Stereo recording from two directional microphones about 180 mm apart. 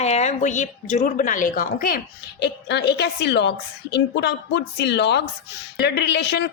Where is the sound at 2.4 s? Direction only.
70° left (ahead or behind).